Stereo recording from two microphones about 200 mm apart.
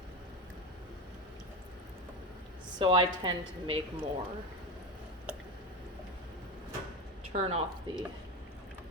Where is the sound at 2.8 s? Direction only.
25° right (ahead or behind).